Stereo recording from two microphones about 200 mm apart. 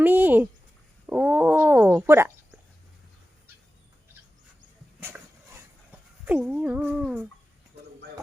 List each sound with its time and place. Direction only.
0.0 s a sound: 10° right (ahead or behind)
1.0 s speech: 10° right (ahead or behind)
5.0 s dog: 10° right (ahead or behind)
6.2 s speech: 5° right (ahead or behind)